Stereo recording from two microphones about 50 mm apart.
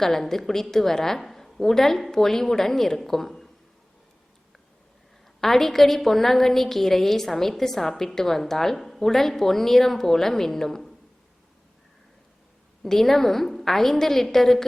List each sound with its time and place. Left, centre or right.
0.0 s a woman's voice: centre
5.4 s a woman's voice: centre
12.8 s a woman's voice: centre